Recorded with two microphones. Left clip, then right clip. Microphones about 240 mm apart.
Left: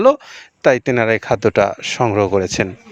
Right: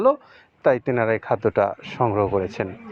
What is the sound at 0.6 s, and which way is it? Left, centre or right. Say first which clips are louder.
Speech: left 5 dB; left.